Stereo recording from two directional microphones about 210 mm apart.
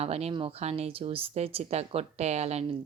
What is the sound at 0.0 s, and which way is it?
Speech, 30° right (ahead or behind).